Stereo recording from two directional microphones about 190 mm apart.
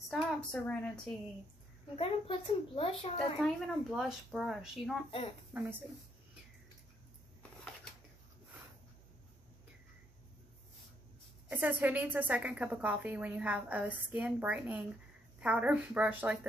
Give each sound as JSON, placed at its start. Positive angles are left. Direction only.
{"t": 0.1, "sound": "a woman's voice", "side_deg": 5}
{"t": 2.0, "sound": "a child's voice", "side_deg": 30}
{"t": 3.3, "sound": "a woman's voice", "side_deg": 0}
{"t": 11.5, "sound": "a woman's voice", "side_deg": -10}